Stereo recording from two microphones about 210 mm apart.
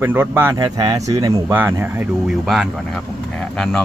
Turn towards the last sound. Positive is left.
turn(degrees=5)  # may be behind; listen again after turning